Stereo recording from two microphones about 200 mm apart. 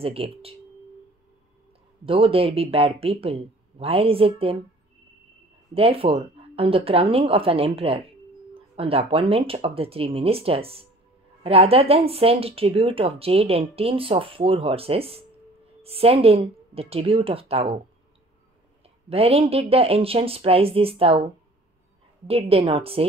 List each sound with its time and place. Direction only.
0.0 s speech: 30° right (ahead or behind)
2.0 s speech: 30° right (ahead or behind)
5.8 s speech: 30° right (ahead or behind)
19.0 s speech: 30° right (ahead or behind)
22.3 s speech: 30° right (ahead or behind)